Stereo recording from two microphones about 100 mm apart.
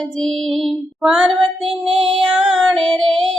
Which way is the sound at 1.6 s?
65° right (ahead or behind).